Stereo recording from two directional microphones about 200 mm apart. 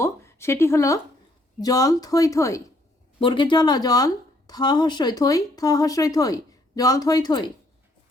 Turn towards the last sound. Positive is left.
turn(degrees=20)  # may be behind; listen again after turning